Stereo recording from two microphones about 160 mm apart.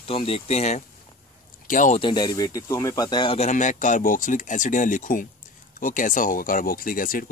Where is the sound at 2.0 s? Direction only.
25° left (ahead or behind).